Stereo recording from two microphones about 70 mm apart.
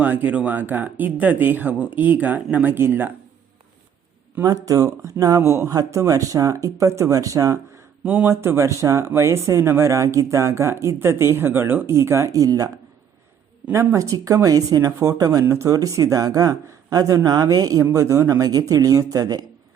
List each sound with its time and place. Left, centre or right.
0.0 s speech: right
4.4 s speech: right
5.7 s speech: right
8.0 s speech: right
8.3 s speech: right
13.7 s speech: right
17.9 s speech: right